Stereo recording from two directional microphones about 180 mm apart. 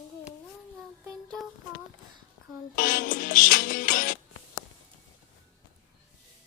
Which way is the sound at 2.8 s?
50° left (ahead or behind).